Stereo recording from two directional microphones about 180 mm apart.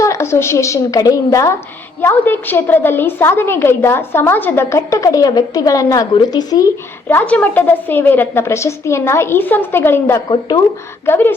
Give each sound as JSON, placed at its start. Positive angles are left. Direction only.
{"t": 0.0, "sound": "a woman's voice", "side_deg": 15}
{"t": 7.1, "sound": "a woman's voice", "side_deg": 10}